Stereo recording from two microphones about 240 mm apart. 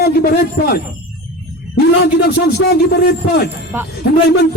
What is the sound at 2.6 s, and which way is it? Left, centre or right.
A man's voice, left.